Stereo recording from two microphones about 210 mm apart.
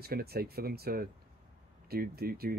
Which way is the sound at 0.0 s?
45° right (ahead or behind).